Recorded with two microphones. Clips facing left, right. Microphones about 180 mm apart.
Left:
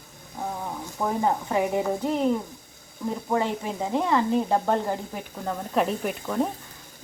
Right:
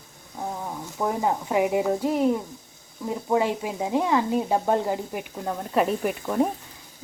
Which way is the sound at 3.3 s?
10° right (ahead or behind).